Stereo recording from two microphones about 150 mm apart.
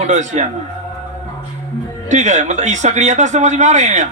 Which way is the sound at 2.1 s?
55° right (ahead or behind).